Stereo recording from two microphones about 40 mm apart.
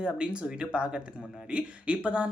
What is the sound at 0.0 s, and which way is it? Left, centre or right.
Speech, right.